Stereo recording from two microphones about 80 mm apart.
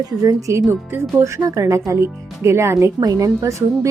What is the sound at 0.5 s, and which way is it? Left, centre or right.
A woman's voice, right.